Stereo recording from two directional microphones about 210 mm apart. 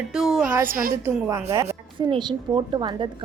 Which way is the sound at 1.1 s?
15° right (ahead or behind).